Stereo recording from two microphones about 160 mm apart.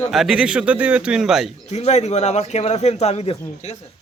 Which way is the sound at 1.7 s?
45° left (ahead or behind).